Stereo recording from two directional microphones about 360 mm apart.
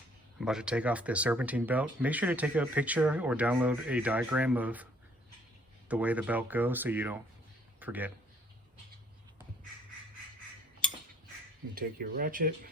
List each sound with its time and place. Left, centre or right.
0.3 s speech: centre
5.9 s speech: centre
11.7 s speech: right